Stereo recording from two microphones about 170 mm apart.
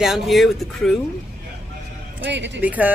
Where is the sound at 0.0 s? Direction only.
Centre (ahead or behind).